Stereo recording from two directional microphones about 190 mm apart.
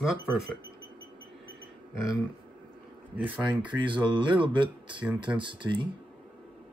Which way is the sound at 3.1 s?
10° right (ahead or behind).